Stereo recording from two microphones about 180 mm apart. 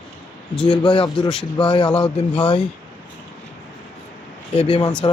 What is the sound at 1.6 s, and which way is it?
Speech, 25° left (ahead or behind).